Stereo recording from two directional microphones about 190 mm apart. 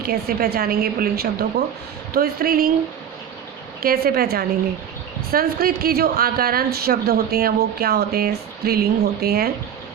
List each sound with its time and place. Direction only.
0.0 s speech: 55° right (ahead or behind)
3.8 s speech: 50° right (ahead or behind)